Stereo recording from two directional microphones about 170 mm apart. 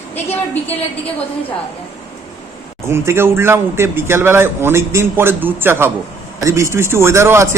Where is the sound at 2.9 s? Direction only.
15° right (ahead or behind).